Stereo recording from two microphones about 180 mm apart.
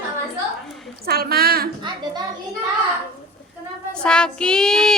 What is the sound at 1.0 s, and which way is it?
Speech, 60° right (ahead or behind).